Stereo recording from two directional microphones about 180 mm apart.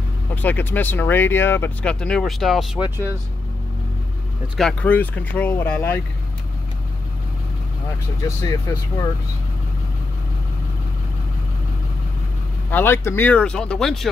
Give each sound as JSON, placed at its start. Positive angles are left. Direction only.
{"t": 0.3, "sound": "speech", "side_deg": 10}
{"t": 4.6, "sound": "speech", "side_deg": 5}
{"t": 8.4, "sound": "speech", "side_deg": 15}
{"t": 12.7, "sound": "speech", "side_deg": 15}